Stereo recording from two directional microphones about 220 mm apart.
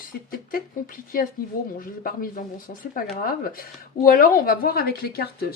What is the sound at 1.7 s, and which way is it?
Speech, 40° left (ahead or behind).